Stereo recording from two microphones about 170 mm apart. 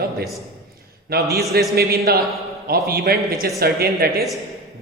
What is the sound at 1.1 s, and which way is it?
A man's voice, 60° right (ahead or behind).